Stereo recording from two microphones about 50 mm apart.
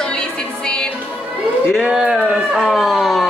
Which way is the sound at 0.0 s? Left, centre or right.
Centre.